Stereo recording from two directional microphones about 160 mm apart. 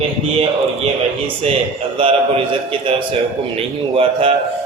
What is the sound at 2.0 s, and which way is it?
Speech, 35° right (ahead or behind).